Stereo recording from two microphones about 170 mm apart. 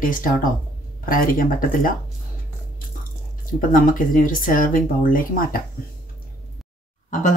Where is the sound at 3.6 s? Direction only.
55° left (ahead or behind).